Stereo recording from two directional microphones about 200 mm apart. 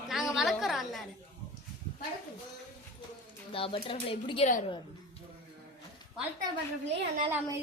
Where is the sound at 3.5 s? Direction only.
25° left (ahead or behind).